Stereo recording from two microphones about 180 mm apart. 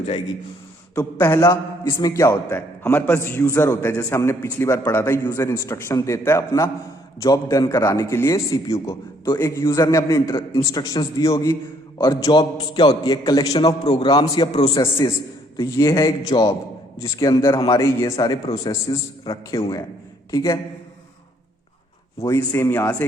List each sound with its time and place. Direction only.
0.9 s a man's voice: 15° left (ahead or behind)
22.3 s a man's voice: 15° left (ahead or behind)